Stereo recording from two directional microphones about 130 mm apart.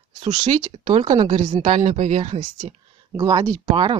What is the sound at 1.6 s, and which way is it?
Speech, 65° right (ahead or behind).